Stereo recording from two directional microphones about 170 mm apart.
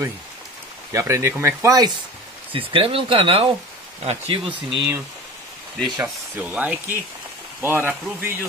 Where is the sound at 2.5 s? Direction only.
30° right (ahead or behind).